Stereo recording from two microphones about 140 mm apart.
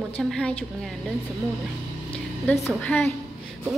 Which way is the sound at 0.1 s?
5° left (ahead or behind).